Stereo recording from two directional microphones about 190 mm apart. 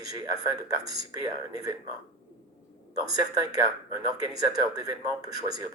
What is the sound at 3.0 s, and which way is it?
Speech, 20° right (ahead or behind).